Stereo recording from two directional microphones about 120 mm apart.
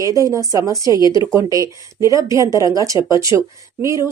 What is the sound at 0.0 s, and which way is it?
Speech, 30° right (ahead or behind).